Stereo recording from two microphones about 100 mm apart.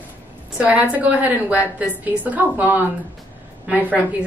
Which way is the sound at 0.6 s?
15° right (ahead or behind).